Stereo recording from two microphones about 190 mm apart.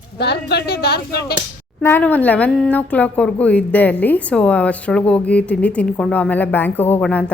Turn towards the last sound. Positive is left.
turn(degrees=5)  # may be behind; listen again after turning